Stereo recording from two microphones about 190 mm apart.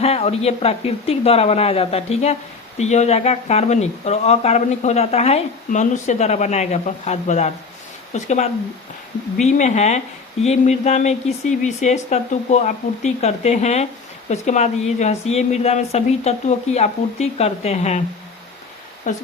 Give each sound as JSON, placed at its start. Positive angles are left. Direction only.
{"t": 0.0, "sound": "speech", "side_deg": 30}
{"t": 19.1, "sound": "speech", "side_deg": 40}